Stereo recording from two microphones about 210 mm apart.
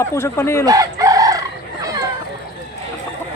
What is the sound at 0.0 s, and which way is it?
Speech, 10° left (ahead or behind).